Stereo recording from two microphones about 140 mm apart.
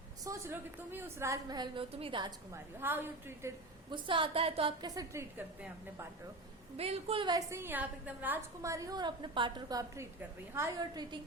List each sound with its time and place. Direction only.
0.3 s a woman's voice: 20° right (ahead or behind); by 2.3 s 35° right (ahead or behind)
2.5 s a woman's voice: 15° right (ahead or behind)
3.9 s a woman's voice: 35° right (ahead or behind)
4.9 s a woman's voice: 20° right (ahead or behind)
6.7 s a woman's voice: 45° right (ahead or behind)
7.3 s a woman's voice: 20° right (ahead or behind)